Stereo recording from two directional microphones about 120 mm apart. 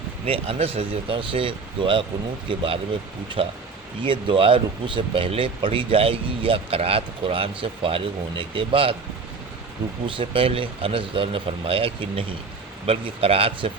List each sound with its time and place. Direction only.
0.3 s speech: 50° right (ahead or behind)
3.4 s speech: 55° right (ahead or behind)
10.2 s speech: 50° right (ahead or behind)